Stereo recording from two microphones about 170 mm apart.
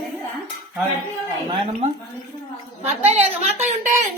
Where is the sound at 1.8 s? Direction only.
45° right (ahead or behind).